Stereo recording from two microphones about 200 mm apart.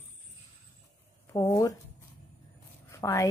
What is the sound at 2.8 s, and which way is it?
Zipper, 15° left (ahead or behind).